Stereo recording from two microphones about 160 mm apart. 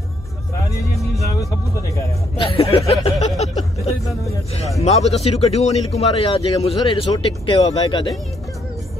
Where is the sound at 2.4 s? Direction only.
35° left (ahead or behind).